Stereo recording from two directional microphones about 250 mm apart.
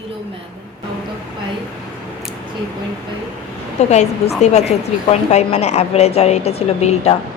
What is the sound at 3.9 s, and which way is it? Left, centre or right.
A woman's voice, left.